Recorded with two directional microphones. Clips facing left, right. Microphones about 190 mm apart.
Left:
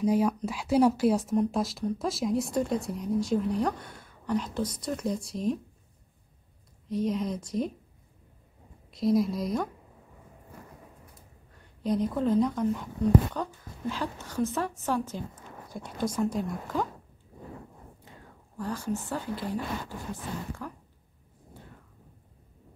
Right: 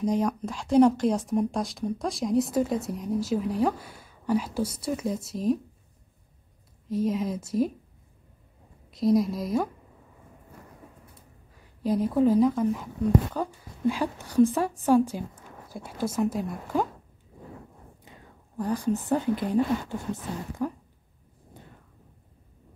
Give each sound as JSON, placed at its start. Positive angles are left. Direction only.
{"t": 0.0, "sound": "speech", "side_deg": 5}
{"t": 6.9, "sound": "speech", "side_deg": 0}
{"t": 8.9, "sound": "speech", "side_deg": 0}
{"t": 11.8, "sound": "speech", "side_deg": -5}
{"t": 16.7, "sound": "speech", "side_deg": -10}
{"t": 18.6, "sound": "speech", "side_deg": -15}
{"t": 20.6, "sound": "a sound", "side_deg": -20}